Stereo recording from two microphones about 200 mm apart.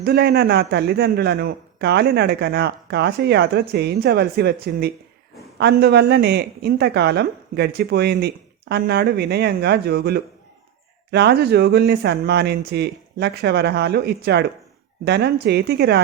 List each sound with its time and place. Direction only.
0.0 s a man's voice: 55° right (ahead or behind)